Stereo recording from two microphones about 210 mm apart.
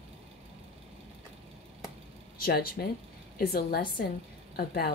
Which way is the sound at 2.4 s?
45° left (ahead or behind).